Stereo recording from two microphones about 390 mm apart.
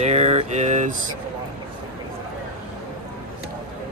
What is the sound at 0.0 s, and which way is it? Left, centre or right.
Speech, centre.